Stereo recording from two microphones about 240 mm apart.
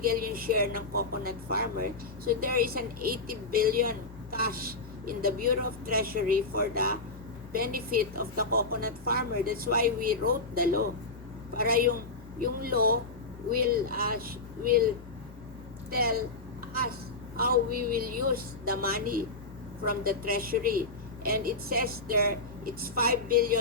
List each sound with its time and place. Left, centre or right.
0.0 s speech: right
15.9 s speech: right
17.3 s a woman's voice: right